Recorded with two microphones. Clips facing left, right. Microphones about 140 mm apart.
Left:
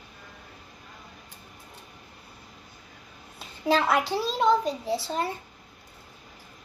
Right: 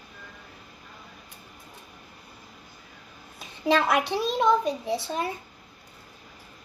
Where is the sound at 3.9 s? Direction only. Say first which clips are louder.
Right 1 dB; 20° right (ahead or behind).